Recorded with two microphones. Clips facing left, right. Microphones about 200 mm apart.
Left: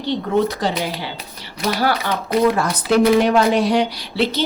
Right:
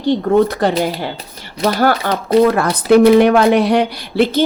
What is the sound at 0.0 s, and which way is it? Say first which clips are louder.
Speech: right 6 dB; 50° right (ahead or behind).